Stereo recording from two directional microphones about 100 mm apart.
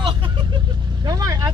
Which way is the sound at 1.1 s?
35° right (ahead or behind).